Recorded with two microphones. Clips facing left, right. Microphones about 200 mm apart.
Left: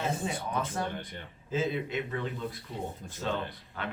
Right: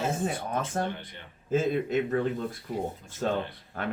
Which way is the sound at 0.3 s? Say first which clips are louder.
Right 2 dB; 45° right (ahead or behind).